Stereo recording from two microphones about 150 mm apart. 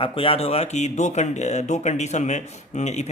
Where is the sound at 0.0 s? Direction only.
40° left (ahead or behind).